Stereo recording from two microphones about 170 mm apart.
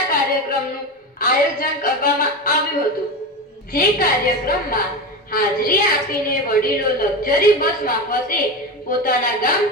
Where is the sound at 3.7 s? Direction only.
60° left (ahead or behind).